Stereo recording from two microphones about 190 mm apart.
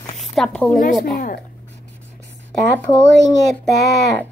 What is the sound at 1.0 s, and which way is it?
Speech, 50° left (ahead or behind).